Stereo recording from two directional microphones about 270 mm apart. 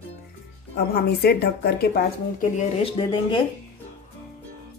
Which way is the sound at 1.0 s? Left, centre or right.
Left.